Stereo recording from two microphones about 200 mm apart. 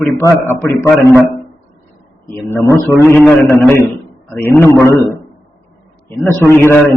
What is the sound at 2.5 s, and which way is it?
Speech, 10° left (ahead or behind).